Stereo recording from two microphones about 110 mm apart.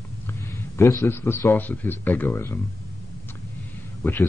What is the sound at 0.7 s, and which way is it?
A man's voice, 25° left (ahead or behind).